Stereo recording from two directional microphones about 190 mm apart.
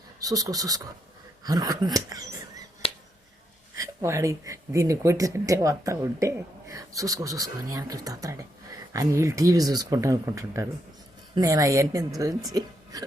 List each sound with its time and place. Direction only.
0.2 s speech: 20° right (ahead or behind)
3.8 s speech: 15° right (ahead or behind)